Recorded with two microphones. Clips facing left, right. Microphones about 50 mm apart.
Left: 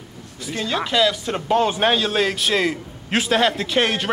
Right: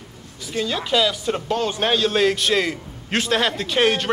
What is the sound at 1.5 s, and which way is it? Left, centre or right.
Speech, centre.